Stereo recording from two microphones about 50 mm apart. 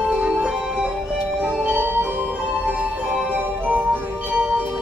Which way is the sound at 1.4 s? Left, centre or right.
Right.